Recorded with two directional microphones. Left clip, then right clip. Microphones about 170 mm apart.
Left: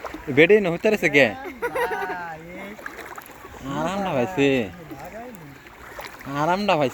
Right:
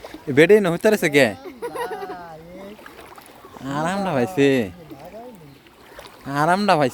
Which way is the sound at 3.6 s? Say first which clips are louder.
Right 2 dB; 45° right (ahead or behind).